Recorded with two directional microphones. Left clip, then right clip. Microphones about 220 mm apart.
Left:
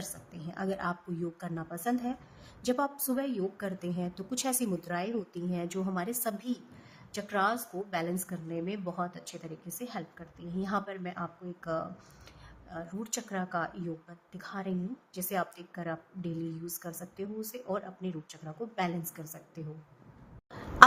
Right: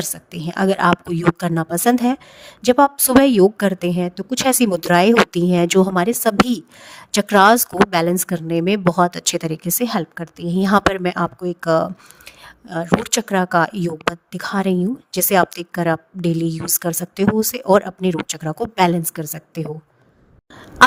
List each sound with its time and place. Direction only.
0.3 s a woman's voice: 50° right (ahead or behind)